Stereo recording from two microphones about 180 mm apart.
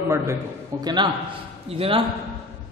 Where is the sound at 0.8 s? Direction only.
25° right (ahead or behind).